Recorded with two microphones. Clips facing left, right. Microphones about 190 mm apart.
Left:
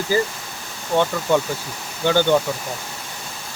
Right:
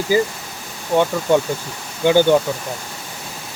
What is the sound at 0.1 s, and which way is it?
Speech, 15° right (ahead or behind).